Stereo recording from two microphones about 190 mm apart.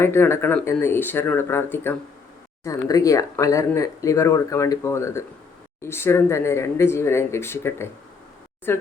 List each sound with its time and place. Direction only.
0.0 s speech: 15° left (ahead or behind)